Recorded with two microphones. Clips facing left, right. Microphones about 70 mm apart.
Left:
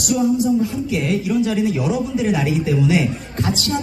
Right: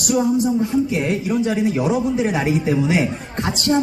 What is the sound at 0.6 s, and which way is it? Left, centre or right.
Speech, right.